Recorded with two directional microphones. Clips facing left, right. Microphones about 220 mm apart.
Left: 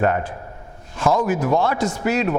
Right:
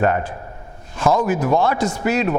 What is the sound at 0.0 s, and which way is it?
A man's voice, 15° right (ahead or behind).